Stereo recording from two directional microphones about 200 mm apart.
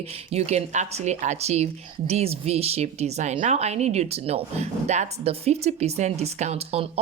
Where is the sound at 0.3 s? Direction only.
30° right (ahead or behind).